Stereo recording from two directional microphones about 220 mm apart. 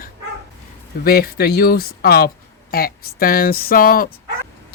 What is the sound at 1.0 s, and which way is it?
Speech, 45° left (ahead or behind).